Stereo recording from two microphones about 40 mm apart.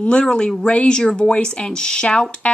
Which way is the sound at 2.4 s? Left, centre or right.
Left.